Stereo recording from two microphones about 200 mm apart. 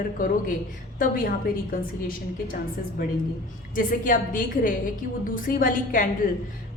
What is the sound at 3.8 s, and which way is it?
A woman's voice, 45° left (ahead or behind).